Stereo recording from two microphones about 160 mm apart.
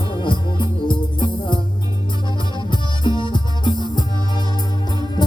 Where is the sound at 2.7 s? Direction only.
30° left (ahead or behind).